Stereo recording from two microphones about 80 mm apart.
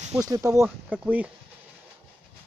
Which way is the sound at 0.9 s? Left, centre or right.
Centre.